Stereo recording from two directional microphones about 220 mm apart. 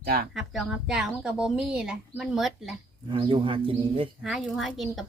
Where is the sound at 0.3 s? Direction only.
Centre (ahead or behind).